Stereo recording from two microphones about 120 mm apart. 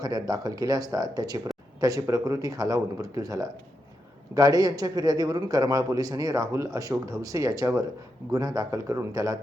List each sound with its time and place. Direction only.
0.0 s a man's voice: 30° right (ahead or behind)